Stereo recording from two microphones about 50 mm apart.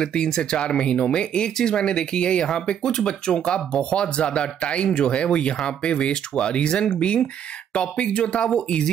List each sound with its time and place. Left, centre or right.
0.0 s speech: centre